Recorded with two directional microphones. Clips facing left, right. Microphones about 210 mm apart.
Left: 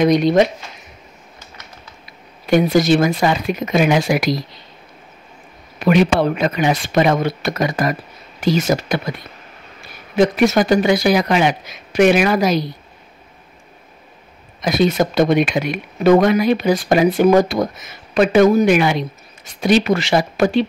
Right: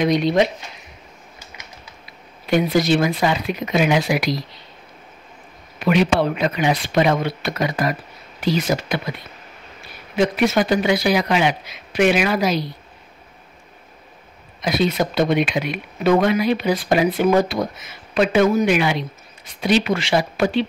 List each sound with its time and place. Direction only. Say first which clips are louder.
0.0 s speech: left 4 dB; 45° left (ahead or behind)
2.5 s speech: left 4 dB; 45° left (ahead or behind)
5.8 s speech: left 3 dB; 45° left (ahead or behind)
10.1 s speech: left 4 dB; 40° left (ahead or behind)
14.6 s speech: left 4 dB; 45° left (ahead or behind)